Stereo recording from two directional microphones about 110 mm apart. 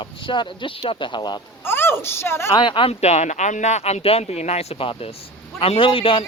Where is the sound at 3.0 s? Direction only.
85° left.